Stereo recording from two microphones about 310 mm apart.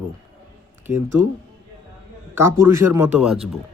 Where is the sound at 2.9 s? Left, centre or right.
Centre.